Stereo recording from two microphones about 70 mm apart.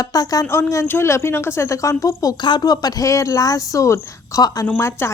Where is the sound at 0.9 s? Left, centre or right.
Left.